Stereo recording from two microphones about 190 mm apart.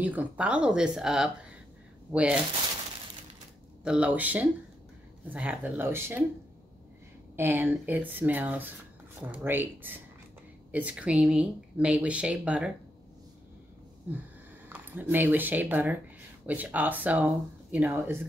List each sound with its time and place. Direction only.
0.0 s speech: 10° right (ahead or behind)
3.8 s speech: 5° right (ahead or behind)
7.3 s speech: 10° right (ahead or behind)
14.7 s speech: 10° right (ahead or behind)